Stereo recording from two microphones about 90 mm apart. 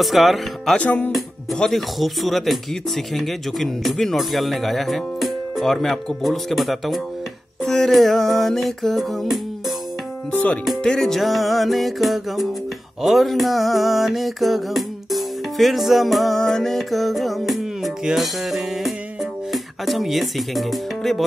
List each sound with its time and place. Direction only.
0.0 s speech: centre (ahead or behind)
0.7 s speech: 20° left (ahead or behind)
1.1 s speech: 5° left (ahead or behind)
7.6 s a sound: 5° left (ahead or behind)
10.3 s speech: 15° left (ahead or behind)
10.6 s speech: 5° left (ahead or behind)
13.0 s a sound: centre (ahead or behind)
19.5 s speech: centre (ahead or behind)